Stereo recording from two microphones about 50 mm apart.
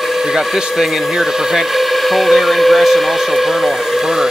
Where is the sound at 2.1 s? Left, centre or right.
Centre.